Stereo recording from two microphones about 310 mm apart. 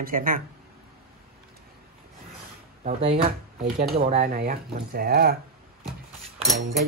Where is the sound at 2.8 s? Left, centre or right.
Centre.